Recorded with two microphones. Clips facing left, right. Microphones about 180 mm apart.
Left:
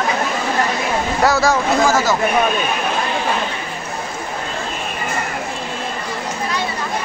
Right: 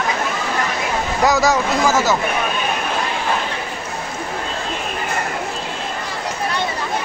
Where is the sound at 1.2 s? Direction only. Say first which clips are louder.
Even; 15° right (ahead or behind).